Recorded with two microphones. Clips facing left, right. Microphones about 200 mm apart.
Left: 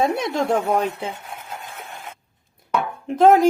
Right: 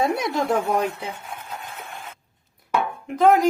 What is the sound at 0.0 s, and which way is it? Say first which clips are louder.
Speech: left 2 dB; 25° left (ahead or behind).